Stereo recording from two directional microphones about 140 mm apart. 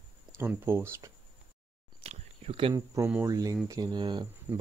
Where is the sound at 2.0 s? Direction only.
45° right (ahead or behind).